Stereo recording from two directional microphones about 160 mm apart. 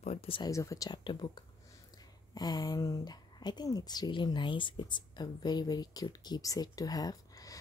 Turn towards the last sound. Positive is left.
turn(degrees=25)  # may be behind; listen again after turning